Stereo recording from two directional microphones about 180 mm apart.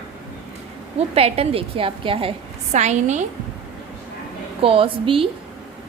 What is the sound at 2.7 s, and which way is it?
Speech, 40° right (ahead or behind).